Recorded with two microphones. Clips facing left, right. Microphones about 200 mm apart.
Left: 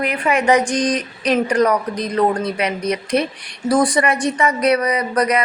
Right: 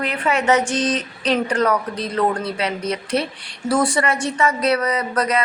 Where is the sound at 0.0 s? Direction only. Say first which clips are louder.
Left 3 dB; 15° left (ahead or behind).